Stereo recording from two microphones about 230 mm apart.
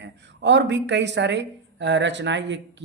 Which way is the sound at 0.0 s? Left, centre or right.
Right.